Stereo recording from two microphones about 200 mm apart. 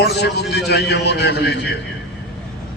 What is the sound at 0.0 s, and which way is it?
A man's voice, 55° left (ahead or behind).